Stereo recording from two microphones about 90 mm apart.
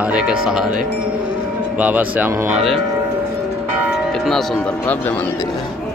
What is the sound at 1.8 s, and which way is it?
Speech, 20° right (ahead or behind).